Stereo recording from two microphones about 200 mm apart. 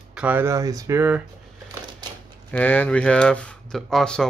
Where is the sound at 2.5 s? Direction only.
10° left (ahead or behind).